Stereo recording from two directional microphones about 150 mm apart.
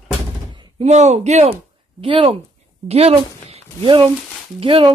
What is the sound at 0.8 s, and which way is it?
Speech, 50° right (ahead or behind).